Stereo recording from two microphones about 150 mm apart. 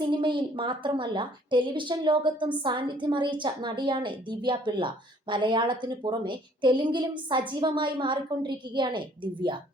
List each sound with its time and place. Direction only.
0.0 s a woman's voice: 30° right (ahead or behind)